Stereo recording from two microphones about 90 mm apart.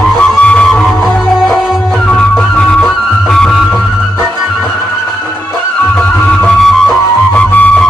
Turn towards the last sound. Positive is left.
turn(degrees=15)  # may be behind; listen again after turning